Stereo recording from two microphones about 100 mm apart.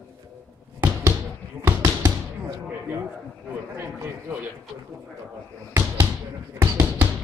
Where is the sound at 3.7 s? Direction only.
20° right (ahead or behind).